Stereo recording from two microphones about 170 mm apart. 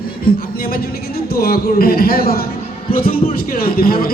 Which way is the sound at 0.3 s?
60° left (ahead or behind).